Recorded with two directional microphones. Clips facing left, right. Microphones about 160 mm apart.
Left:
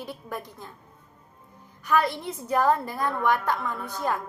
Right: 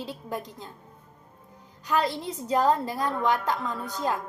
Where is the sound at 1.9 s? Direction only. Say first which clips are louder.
Left 2 dB; 20° right (ahead or behind).